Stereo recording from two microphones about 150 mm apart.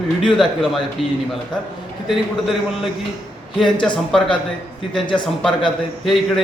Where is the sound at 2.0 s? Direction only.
Centre (ahead or behind).